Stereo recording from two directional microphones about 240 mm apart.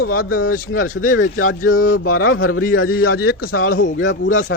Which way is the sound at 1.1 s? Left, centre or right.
Left.